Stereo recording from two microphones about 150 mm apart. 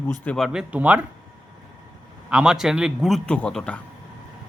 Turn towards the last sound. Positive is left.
turn(degrees=5)  # may be behind; listen again after turning